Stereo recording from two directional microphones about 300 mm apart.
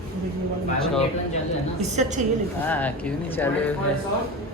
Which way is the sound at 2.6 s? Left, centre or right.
Centre.